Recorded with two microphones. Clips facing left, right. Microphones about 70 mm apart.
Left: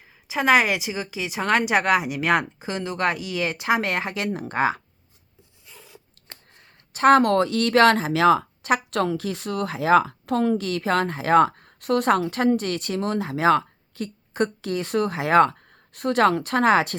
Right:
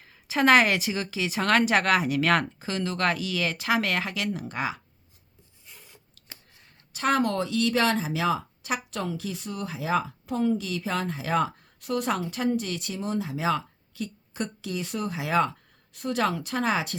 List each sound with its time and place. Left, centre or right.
0.0 s a woman's voice: centre; by 4.3 s left
4.3 s speech: left
6.9 s speech: left